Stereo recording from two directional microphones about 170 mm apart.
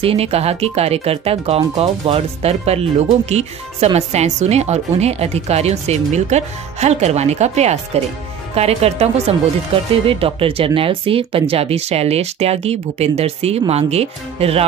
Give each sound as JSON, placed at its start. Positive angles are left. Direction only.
{"t": 0.0, "sound": "speech", "side_deg": -35}